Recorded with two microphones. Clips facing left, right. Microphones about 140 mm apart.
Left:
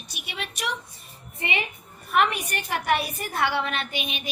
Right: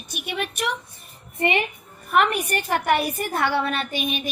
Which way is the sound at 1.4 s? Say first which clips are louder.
Right 7 dB; 55° right (ahead or behind).